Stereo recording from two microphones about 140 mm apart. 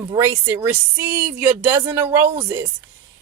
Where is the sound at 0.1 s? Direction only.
20° right (ahead or behind).